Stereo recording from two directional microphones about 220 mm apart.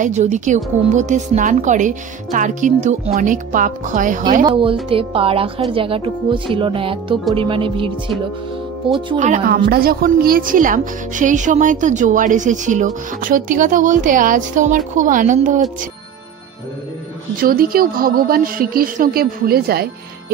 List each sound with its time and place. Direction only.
0.0 s a woman's voice: 35° right (ahead or behind)
4.5 s speech: 25° right (ahead or behind)
9.2 s a woman's voice: 35° right (ahead or behind)
17.4 s a woman's voice: 40° right (ahead or behind)